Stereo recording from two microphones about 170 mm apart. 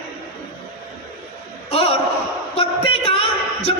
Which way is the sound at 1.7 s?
35° left (ahead or behind).